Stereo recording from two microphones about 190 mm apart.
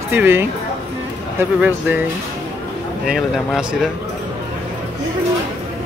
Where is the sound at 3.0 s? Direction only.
5° right (ahead or behind).